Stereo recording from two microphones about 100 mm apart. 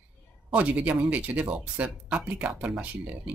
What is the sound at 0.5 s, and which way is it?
Speech, 15° right (ahead or behind).